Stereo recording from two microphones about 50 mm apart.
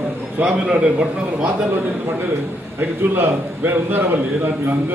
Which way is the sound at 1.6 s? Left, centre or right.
Right.